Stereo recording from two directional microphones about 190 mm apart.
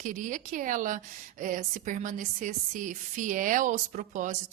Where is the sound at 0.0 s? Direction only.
45° right (ahead or behind).